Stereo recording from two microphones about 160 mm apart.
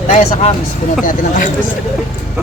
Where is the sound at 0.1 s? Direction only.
45° left (ahead or behind).